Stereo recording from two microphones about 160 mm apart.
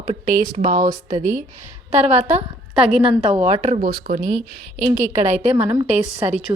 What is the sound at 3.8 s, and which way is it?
Speech, 65° right (ahead or behind).